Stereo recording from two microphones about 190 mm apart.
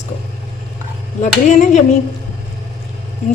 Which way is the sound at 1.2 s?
40° left (ahead or behind).